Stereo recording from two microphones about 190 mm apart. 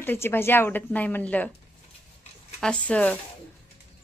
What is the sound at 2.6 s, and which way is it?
Speech, 5° left (ahead or behind).